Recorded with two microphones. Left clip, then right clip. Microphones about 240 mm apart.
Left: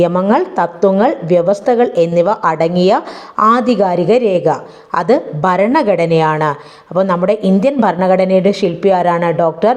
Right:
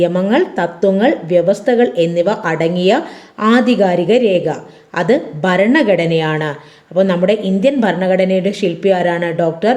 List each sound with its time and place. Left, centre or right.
0.0 s a woman's voice: centre